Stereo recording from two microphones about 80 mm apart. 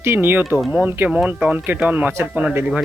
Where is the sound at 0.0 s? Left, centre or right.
Right.